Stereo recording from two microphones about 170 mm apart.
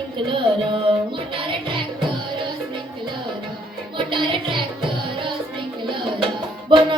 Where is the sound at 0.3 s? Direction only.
30° right (ahead or behind).